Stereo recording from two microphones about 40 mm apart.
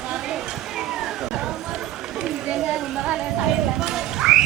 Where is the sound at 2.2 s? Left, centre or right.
Right.